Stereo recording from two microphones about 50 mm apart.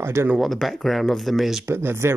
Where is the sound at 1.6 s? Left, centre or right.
Right.